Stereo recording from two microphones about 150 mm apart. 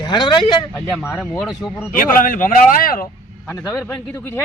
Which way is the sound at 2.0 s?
65° left (ahead or behind).